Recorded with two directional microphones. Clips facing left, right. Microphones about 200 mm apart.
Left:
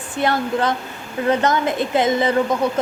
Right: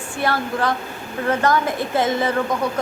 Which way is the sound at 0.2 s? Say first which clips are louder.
Left 3 dB; 20° left (ahead or behind).